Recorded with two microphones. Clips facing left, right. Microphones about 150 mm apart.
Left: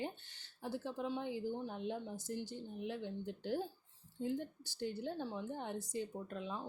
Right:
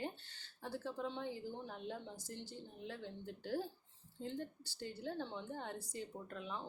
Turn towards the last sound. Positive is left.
turn(degrees=20)  # may be behind; listen again after turning